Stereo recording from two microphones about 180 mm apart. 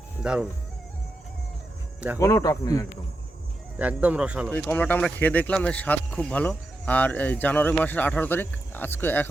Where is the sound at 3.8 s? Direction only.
5° right (ahead or behind).